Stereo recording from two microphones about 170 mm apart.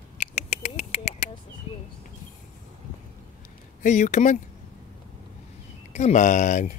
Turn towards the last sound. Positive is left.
turn(degrees=45)  # may be behind; listen again after turning